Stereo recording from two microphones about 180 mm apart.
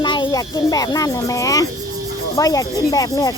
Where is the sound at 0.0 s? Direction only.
25° left (ahead or behind).